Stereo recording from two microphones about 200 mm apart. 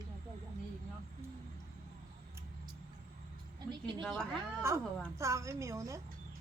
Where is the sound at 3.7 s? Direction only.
25° right (ahead or behind).